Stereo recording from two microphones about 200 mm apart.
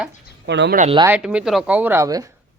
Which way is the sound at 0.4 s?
60° right (ahead or behind).